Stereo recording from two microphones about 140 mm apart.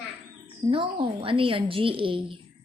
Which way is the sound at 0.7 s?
40° right (ahead or behind).